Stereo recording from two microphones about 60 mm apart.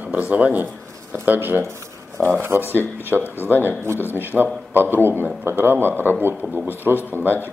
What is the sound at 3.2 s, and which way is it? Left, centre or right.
Speech, left.